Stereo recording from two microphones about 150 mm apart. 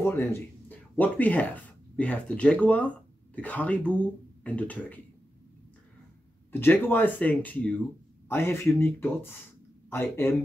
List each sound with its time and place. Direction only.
0.0 s speech: 15° left (ahead or behind)
6.5 s speech: 15° left (ahead or behind)